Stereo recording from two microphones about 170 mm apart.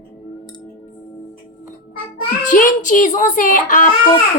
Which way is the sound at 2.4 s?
50° left (ahead or behind).